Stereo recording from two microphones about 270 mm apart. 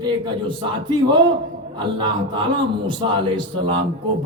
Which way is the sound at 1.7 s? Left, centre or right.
Centre.